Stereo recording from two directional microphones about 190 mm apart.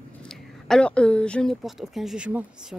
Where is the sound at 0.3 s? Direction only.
5° left (ahead or behind).